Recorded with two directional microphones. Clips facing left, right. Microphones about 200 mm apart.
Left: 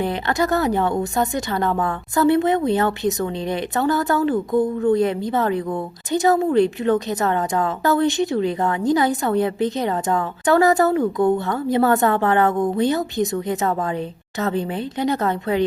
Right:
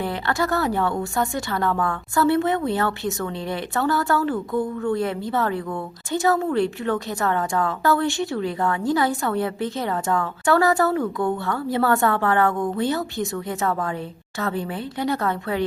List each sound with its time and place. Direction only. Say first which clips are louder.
0.0 s a woman's voice: left 3 dB; 20° left (ahead or behind)